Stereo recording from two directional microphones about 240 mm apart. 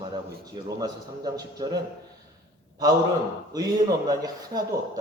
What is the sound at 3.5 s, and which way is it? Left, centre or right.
A man's voice, centre.